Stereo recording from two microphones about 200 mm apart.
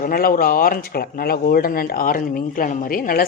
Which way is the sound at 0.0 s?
45° left (ahead or behind).